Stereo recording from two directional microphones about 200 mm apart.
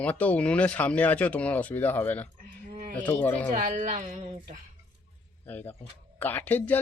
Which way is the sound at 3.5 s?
40° right (ahead or behind).